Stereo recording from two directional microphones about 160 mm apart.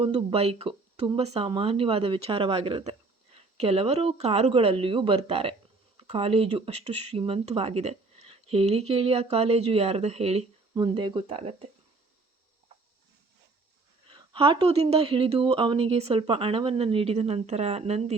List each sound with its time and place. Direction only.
0.0 s speech: 35° right (ahead or behind)
14.1 s speech: 30° right (ahead or behind)